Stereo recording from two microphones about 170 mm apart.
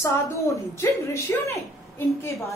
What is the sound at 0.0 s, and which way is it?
A woman's voice, 15° left (ahead or behind).